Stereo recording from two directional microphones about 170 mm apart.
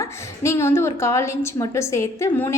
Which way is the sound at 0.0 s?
15° left (ahead or behind).